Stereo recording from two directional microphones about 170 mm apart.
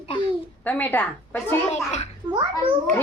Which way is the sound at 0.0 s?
35° left (ahead or behind).